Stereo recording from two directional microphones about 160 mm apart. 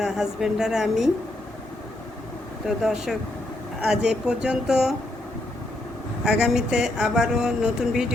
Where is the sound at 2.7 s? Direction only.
5° right (ahead or behind).